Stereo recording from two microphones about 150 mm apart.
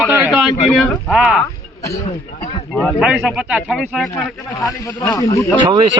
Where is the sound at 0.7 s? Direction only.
5° right (ahead or behind).